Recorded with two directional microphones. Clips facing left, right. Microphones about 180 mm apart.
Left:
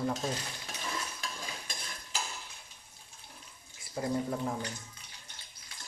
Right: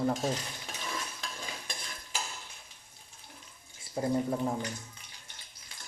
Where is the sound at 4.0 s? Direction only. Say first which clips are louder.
Right 3 dB; 25° right (ahead or behind).